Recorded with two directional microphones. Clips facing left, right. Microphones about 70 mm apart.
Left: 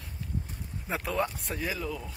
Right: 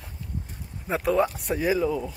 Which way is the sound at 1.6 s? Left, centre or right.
Right.